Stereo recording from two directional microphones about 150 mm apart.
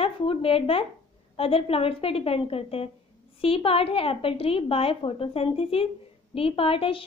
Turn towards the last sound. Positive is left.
turn(degrees=40)  # may be behind; listen again after turning